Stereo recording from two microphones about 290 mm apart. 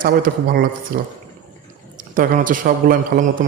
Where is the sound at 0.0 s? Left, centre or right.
Right.